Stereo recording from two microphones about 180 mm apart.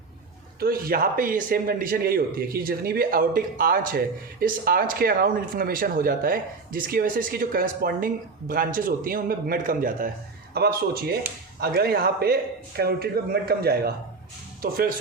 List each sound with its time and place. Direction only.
0.6 s a man's voice: 55° right (ahead or behind)
10.5 s a man's voice: 60° right (ahead or behind)